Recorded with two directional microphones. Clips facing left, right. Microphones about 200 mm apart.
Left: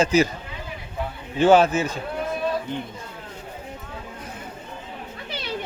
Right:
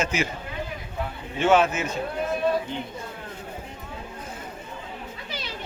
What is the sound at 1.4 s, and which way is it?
Speech, 35° left (ahead or behind).